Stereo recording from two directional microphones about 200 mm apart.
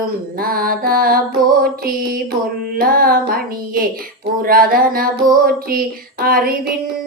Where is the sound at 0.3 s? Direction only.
45° right (ahead or behind).